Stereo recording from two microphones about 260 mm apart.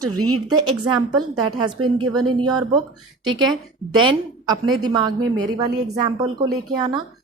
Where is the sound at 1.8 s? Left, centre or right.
Right.